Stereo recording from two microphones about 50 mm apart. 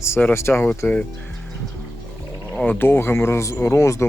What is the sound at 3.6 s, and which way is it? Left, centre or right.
Speech, left.